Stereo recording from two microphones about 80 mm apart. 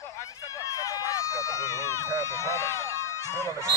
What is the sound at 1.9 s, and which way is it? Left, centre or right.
Run, right.